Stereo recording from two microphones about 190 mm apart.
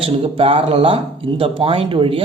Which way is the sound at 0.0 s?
30° right (ahead or behind).